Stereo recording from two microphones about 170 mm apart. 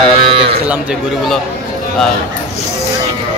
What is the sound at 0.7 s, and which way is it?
Speech, 5° right (ahead or behind).